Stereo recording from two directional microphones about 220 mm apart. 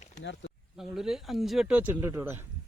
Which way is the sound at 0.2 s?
55° left (ahead or behind).